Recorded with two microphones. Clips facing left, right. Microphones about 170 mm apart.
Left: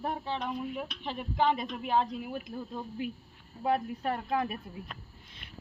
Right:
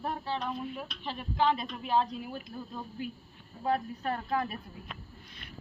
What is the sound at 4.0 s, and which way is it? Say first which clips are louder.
Speech: left 1 dB; 15° left (ahead or behind).